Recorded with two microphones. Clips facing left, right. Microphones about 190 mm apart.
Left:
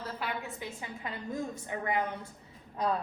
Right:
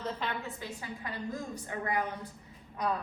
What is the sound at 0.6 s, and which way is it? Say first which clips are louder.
A woman's voice: even; 20° left (ahead or behind).